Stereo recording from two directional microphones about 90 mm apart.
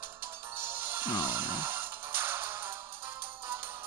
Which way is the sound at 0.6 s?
20° right (ahead or behind).